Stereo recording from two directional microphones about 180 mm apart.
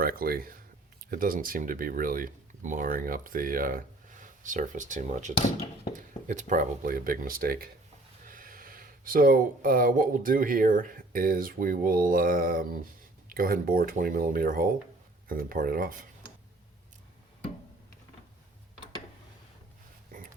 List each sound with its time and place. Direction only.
0.0 s speech: 55° right (ahead or behind)